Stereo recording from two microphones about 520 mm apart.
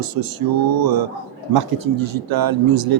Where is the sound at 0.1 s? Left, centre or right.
Right.